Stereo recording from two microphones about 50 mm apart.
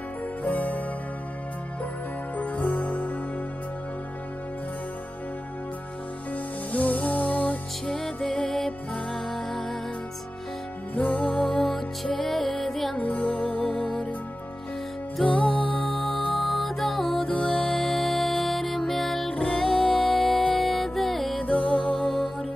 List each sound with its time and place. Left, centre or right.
0.4 s music: left
2.3 s music: left
6.7 s music: left
7.8 s music: centre
8.6 s music: centre
11.0 s music: left
12.1 s music: centre
12.9 s music: left
15.2 s music: left
16.3 s music: centre
21.4 s music: left